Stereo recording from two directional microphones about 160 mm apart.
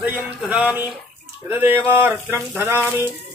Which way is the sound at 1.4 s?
10° right (ahead or behind).